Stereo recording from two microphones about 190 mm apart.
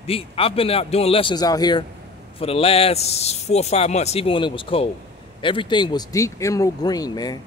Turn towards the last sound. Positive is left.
turn(degrees=20)  # may be behind; listen again after turning